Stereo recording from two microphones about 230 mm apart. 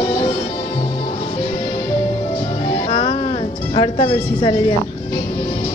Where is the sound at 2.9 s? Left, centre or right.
Left.